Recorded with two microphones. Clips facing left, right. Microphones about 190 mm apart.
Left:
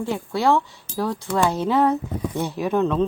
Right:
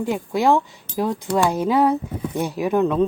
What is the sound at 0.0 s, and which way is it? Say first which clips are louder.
Speech: right 2 dB; 15° right (ahead or behind).